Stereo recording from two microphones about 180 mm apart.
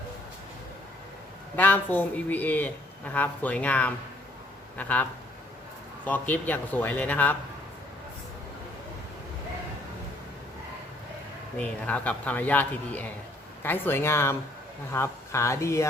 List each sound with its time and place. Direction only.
1.5 s a man's voice: 10° left (ahead or behind)
6.1 s a man's voice: 10° left (ahead or behind)
11.5 s a man's voice: 5° left (ahead or behind)